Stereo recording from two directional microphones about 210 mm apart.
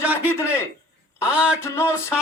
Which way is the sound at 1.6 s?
10° left (ahead or behind).